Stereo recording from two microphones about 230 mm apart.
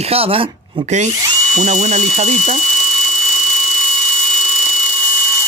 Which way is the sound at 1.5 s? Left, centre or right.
Right.